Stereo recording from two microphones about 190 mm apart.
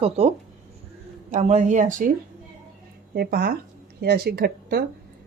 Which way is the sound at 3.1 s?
55° right (ahead or behind).